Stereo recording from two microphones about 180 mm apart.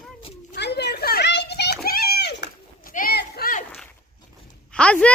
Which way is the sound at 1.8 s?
60° left (ahead or behind).